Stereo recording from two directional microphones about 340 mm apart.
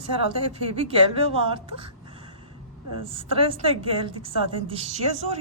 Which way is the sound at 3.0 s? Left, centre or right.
Centre.